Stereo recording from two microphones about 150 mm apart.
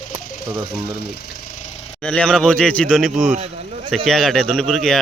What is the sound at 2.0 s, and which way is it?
Speech, 5° left (ahead or behind).